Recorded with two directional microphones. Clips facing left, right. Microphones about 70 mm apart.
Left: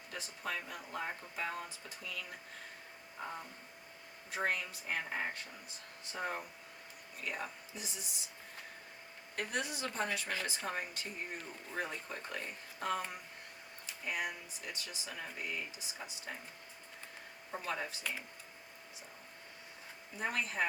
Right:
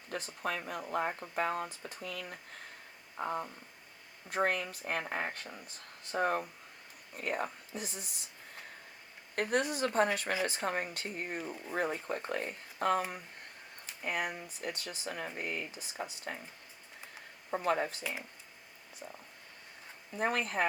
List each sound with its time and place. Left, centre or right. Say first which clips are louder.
0.1 s speech: right 5 dB; right
9.3 s speech: right 7 dB; right
17.5 s speech: right 8 dB; right
20.1 s speech: right 4 dB; right